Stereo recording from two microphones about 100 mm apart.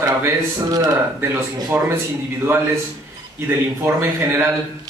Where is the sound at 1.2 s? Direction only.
25° right (ahead or behind).